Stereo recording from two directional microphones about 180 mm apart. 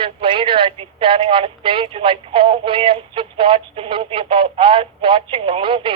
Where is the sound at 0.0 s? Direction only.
30° right (ahead or behind).